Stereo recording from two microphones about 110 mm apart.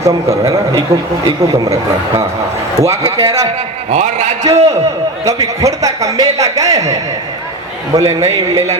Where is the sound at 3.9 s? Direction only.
90° right.